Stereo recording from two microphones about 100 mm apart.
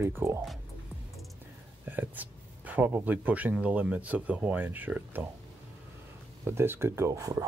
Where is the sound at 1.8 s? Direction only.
15° right (ahead or behind).